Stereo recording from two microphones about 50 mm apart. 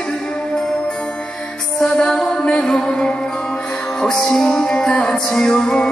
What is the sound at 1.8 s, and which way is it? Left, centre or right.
Music, centre.